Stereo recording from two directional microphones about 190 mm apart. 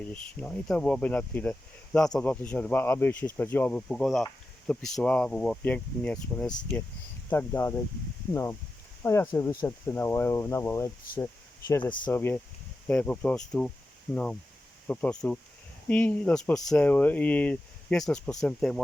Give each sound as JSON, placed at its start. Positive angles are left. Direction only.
{"t": 0.1, "sound": "speech", "side_deg": 5}
{"t": 12.1, "sound": "speech", "side_deg": 10}